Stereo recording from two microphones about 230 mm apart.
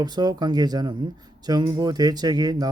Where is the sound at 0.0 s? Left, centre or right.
Centre.